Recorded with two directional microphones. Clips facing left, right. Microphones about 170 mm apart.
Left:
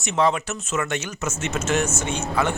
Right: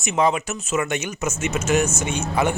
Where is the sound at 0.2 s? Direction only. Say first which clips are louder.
Right 1 dB; 15° right (ahead or behind).